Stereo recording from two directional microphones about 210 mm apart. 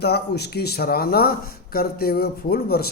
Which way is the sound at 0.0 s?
50° left (ahead or behind).